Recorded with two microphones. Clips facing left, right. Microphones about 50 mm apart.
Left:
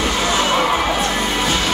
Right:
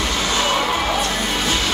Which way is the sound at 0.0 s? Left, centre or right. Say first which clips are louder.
Left 3 dB; centre.